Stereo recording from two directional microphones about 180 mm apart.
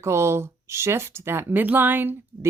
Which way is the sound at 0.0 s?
15° right (ahead or behind).